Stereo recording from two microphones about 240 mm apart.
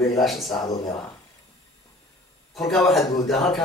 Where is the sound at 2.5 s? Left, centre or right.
Centre.